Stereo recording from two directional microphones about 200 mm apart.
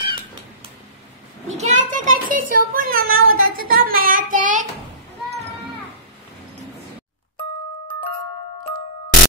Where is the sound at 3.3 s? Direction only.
45° right (ahead or behind).